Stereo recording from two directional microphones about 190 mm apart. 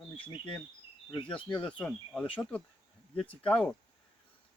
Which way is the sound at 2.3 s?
5° left (ahead or behind).